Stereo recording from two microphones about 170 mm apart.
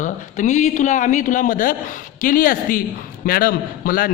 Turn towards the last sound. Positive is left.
turn(degrees=60)  # may be behind; listen again after turning